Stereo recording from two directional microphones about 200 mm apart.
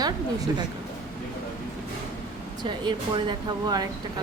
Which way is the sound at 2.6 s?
25° right (ahead or behind).